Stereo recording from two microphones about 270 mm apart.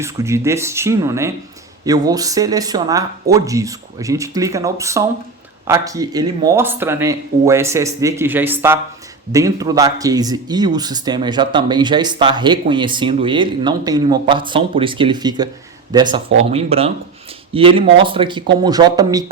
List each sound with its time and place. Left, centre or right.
0.0 s speech: centre